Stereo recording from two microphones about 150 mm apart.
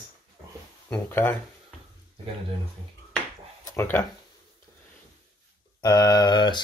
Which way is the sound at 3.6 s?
20° left (ahead or behind).